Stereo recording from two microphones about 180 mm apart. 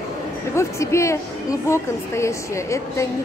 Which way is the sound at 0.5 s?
15° left (ahead or behind).